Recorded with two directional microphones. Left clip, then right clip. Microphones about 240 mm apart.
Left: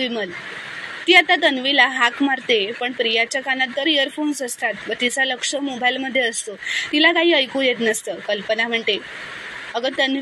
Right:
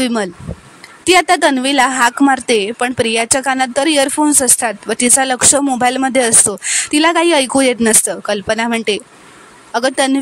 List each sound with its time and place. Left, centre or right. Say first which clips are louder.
0.0 s speech: right 6 dB; right